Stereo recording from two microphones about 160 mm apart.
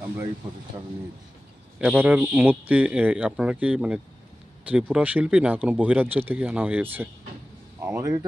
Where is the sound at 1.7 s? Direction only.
10° right (ahead or behind).